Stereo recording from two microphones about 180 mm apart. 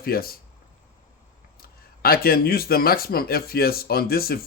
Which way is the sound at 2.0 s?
60° left (ahead or behind).